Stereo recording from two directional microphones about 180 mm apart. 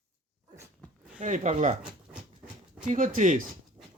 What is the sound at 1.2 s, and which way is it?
Speech, 45° right (ahead or behind).